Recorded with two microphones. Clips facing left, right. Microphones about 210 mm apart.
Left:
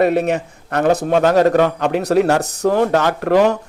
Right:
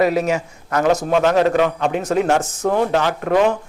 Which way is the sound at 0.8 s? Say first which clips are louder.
Left 2 dB; 35° left (ahead or behind).